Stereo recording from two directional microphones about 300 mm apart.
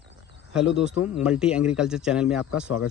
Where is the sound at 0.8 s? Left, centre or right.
Centre.